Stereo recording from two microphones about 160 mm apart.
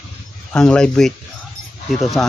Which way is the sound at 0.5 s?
5° left (ahead or behind).